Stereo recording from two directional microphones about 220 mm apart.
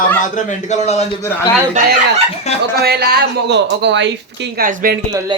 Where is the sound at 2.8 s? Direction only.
45° right (ahead or behind).